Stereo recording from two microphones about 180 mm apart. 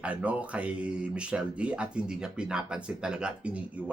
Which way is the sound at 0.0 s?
5° right (ahead or behind).